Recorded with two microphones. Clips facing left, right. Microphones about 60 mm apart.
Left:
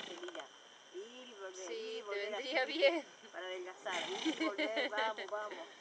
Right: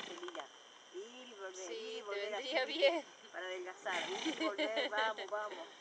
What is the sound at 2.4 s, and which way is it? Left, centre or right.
Speech, left.